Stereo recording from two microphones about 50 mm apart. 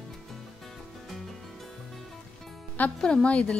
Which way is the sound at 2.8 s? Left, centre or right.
Left.